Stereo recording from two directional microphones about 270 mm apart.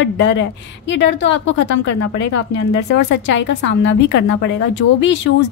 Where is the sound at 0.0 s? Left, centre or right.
Left.